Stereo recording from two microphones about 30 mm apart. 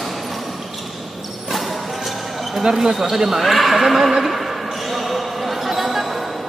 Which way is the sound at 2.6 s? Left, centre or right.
Centre.